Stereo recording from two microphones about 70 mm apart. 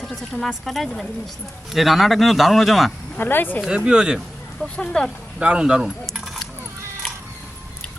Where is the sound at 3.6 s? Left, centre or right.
Centre.